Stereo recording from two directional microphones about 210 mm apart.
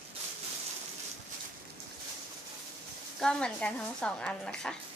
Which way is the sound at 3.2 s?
5° left (ahead or behind).